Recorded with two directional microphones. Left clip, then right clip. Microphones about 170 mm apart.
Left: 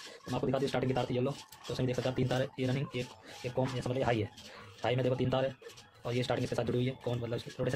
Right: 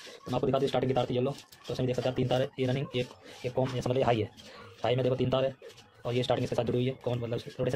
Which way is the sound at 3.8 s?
20° right (ahead or behind).